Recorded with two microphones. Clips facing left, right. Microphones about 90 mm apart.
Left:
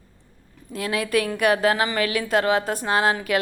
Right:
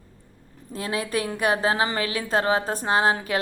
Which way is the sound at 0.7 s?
30° right (ahead or behind).